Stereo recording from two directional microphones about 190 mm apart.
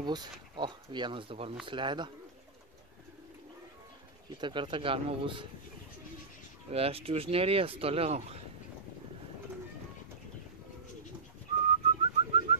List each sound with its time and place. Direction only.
0.0 s speech: 20° right (ahead or behind)
4.4 s speech: 25° right (ahead or behind)
6.7 s speech: 30° right (ahead or behind)
11.5 s whistling: 25° right (ahead or behind)